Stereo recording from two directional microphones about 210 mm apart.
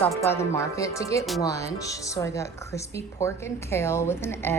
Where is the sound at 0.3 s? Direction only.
15° left (ahead or behind).